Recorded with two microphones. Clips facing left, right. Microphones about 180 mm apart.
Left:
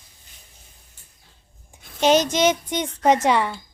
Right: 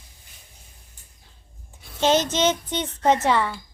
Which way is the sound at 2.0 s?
15° left (ahead or behind).